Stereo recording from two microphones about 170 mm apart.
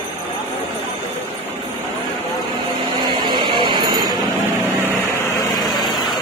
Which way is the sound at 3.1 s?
25° right (ahead or behind).